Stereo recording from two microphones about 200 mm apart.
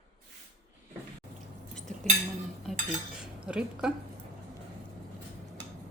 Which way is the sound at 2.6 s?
Centre (ahead or behind).